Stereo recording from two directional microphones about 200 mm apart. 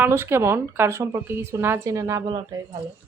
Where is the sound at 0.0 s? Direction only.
10° right (ahead or behind).